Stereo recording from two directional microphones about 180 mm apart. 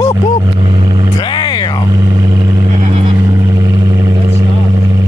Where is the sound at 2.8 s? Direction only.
35° right (ahead or behind).